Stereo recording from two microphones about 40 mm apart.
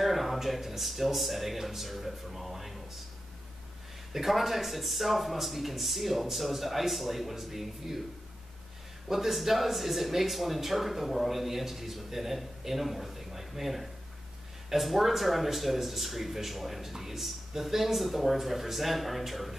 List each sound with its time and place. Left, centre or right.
0.0 s speech: centre
4.1 s speech: centre
9.1 s speech: centre